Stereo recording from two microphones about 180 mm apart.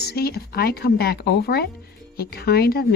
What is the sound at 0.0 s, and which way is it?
Speech, 60° left (ahead or behind).